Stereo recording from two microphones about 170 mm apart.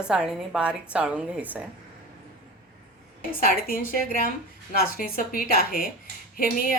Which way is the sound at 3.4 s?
55° left (ahead or behind).